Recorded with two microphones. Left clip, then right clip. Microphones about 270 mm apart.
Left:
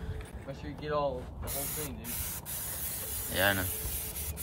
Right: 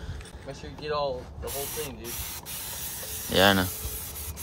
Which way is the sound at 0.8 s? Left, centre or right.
Right.